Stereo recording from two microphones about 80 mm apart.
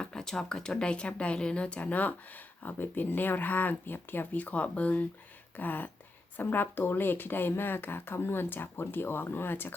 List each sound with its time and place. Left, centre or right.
0.0 s speech: centre; by 9.7 s left